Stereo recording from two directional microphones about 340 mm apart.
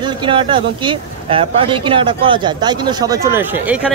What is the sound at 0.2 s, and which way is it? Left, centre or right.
Speech, centre.